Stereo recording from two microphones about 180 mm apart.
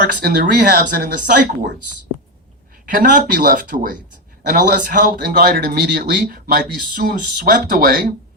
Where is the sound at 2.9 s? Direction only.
50° right (ahead or behind).